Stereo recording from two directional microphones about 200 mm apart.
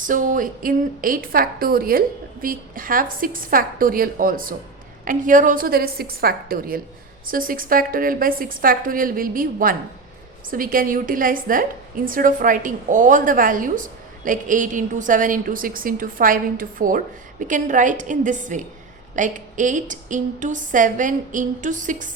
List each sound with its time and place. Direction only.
0.0 s a woman's voice: 40° right (ahead or behind)